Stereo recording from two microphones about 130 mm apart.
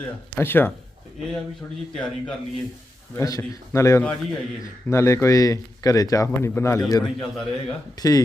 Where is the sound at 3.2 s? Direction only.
25° left (ahead or behind).